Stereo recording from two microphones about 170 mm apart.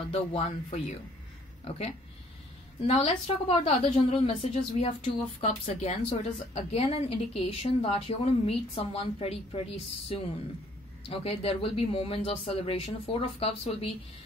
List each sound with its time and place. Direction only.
0.1 s a woman's voice: 35° left (ahead or behind)
2.9 s a woman's voice: 35° left (ahead or behind)